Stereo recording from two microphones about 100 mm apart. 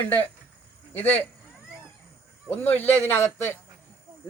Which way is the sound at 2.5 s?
20° left (ahead or behind).